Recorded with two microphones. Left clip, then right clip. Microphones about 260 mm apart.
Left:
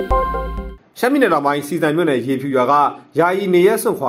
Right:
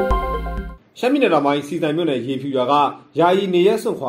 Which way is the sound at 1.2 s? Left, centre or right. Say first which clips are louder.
Even; left.